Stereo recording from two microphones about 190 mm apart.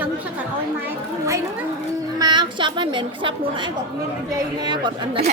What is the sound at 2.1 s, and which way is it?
A woman's voice, 20° right (ahead or behind).